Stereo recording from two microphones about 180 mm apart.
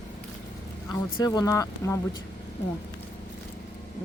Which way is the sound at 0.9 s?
20° left (ahead or behind).